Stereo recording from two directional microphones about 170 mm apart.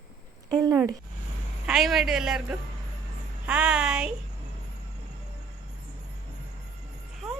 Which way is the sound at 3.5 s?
5° right (ahead or behind).